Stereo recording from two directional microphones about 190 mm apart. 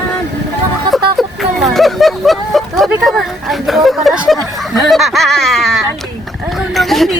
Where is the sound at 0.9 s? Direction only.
Centre (ahead or behind).